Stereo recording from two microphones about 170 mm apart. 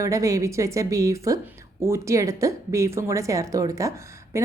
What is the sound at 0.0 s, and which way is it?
A woman's voice, 20° right (ahead or behind).